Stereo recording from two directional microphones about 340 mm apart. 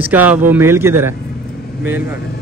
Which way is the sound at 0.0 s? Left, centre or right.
Centre.